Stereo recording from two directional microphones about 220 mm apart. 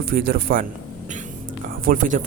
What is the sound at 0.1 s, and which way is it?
Speech, 40° right (ahead or behind).